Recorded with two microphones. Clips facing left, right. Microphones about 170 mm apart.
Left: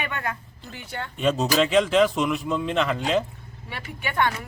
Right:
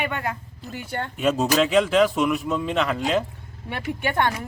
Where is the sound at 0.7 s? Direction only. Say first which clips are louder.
Right 5 dB; 45° right (ahead or behind).